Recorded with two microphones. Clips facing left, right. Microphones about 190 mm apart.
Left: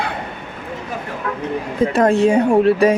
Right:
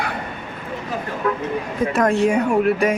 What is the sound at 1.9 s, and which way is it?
Speech, 30° left (ahead or behind).